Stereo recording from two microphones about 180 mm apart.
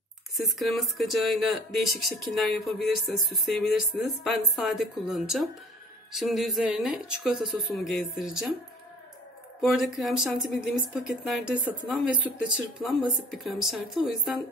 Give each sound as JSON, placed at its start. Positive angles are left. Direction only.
{"t": 0.6, "sound": "speech", "side_deg": 0}
{"t": 9.6, "sound": "speech", "side_deg": 0}